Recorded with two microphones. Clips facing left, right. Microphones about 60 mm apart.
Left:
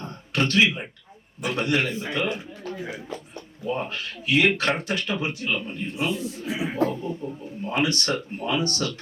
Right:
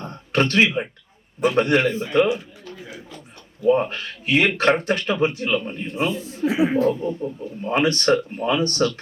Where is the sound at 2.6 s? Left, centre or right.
Left.